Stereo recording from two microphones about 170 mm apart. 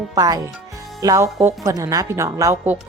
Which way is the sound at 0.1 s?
20° right (ahead or behind).